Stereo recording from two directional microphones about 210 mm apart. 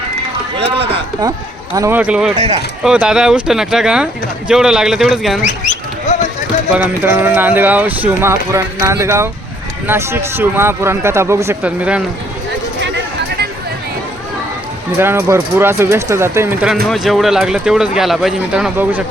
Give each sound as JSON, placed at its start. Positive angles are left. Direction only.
{"t": 1.7, "sound": "speech", "side_deg": -10}
{"t": 5.4, "sound": "goat", "side_deg": 35}
{"t": 6.7, "sound": "speech", "side_deg": -10}
{"t": 14.9, "sound": "speech", "side_deg": -10}